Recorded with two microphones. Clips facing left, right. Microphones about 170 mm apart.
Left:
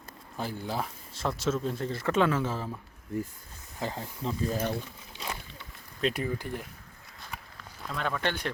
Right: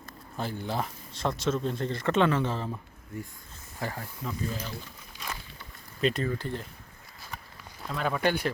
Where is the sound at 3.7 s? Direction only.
20° left (ahead or behind).